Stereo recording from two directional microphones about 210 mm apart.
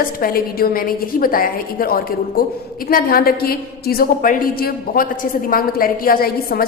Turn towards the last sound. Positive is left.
turn(degrees=45)  # may be behind; listen again after turning